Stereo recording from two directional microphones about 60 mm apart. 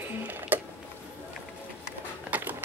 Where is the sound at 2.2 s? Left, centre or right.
Right.